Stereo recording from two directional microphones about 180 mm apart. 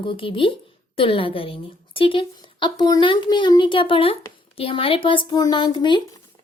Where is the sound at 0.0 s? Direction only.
30° left (ahead or behind).